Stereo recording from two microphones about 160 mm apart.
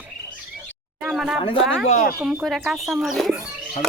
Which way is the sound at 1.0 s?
5° right (ahead or behind).